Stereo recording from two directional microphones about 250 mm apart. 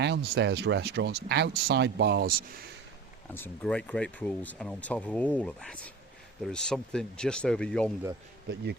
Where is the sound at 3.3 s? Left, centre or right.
Centre.